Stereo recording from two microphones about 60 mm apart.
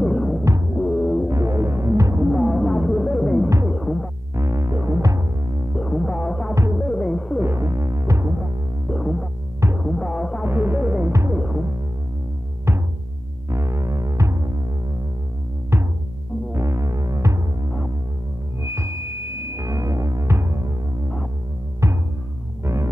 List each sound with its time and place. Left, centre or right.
0.0 s music: centre
1.3 s throbbing: right
2.3 s music: centre
3.7 s throbbing: centre
4.4 s music: right
5.8 s music: centre
7.3 s throbbing: right
8.9 s music: centre
10.4 s music: right
12.7 s music: right
13.5 s throbbing: right
16.5 s music: right
18.6 s music: right
21.8 s music: right